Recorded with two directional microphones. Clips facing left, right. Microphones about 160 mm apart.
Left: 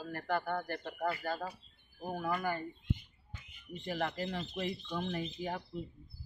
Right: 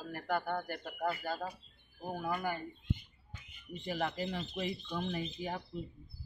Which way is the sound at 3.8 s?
10° right (ahead or behind).